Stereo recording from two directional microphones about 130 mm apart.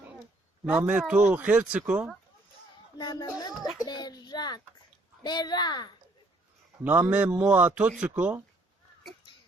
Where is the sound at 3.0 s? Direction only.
35° left (ahead or behind).